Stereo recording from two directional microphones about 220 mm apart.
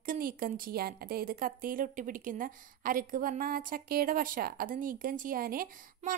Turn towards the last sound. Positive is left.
turn(degrees=-40)  # may be behind; listen again after turning